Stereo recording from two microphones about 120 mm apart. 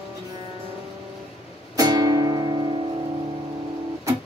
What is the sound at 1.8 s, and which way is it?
Music, 30° right (ahead or behind).